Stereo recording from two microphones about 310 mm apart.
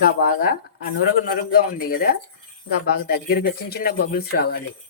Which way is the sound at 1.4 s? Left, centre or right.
Left.